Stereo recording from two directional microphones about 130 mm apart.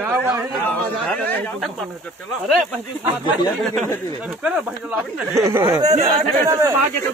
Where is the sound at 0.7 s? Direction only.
10° left (ahead or behind).